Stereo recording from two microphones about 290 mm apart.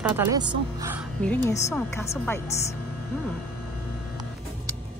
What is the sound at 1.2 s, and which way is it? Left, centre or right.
A woman's voice, centre.